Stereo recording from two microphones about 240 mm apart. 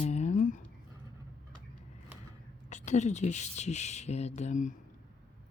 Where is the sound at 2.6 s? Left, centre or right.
Left.